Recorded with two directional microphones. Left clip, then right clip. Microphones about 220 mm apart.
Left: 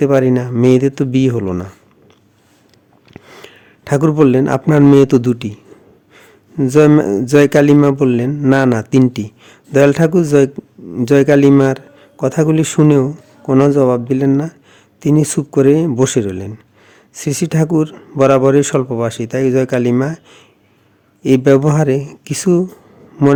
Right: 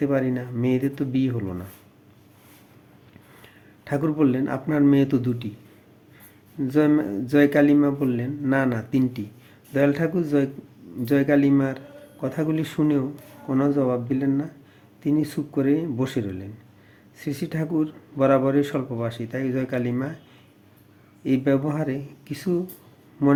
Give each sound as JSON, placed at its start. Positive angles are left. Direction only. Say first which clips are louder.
{"t": 0.0, "sound": "a man's voice", "louder": "left 12 dB", "side_deg": 50}
{"t": 3.4, "sound": "a man's voice", "louder": "left 9 dB", "side_deg": 50}
{"t": 6.6, "sound": "a man's voice", "louder": "left 11 dB", "side_deg": 50}